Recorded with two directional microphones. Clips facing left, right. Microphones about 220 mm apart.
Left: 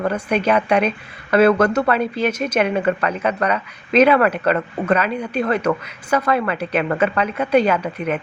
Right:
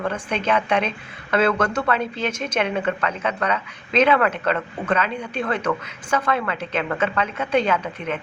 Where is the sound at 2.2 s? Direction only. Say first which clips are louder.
Left 5 dB; 10° left (ahead or behind).